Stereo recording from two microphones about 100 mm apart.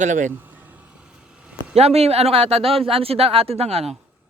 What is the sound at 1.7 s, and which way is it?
Speech, 90° right.